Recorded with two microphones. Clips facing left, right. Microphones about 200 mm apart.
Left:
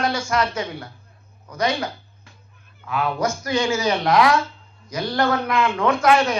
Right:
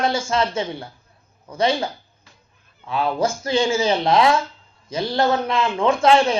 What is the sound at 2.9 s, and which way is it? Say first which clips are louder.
A man's voice: right 2 dB; 30° right (ahead or behind).